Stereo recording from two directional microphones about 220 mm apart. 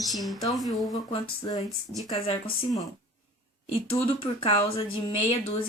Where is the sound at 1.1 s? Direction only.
25° left (ahead or behind).